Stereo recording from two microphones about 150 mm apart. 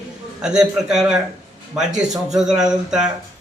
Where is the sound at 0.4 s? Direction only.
5° right (ahead or behind).